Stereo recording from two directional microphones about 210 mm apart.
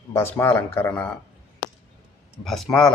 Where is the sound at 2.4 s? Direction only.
Centre (ahead or behind).